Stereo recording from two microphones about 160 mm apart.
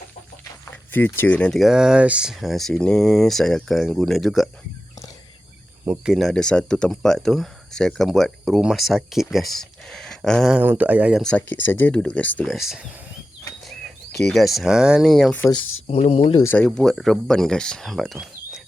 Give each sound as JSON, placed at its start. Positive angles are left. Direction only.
{"t": 0.9, "sound": "speech", "side_deg": 10}
{"t": 6.0, "sound": "speech", "side_deg": 0}
{"t": 11.2, "sound": "speech", "side_deg": 5}
{"t": 12.5, "sound": "speech", "side_deg": -5}
{"t": 14.3, "sound": "speech", "side_deg": 0}
{"t": 15.9, "sound": "speech", "side_deg": 40}
{"t": 16.4, "sound": "speech", "side_deg": 15}
{"t": 16.6, "sound": "speech", "side_deg": 0}